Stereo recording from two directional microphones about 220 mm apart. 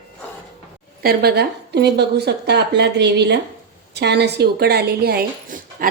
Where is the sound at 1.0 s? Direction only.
45° right (ahead or behind).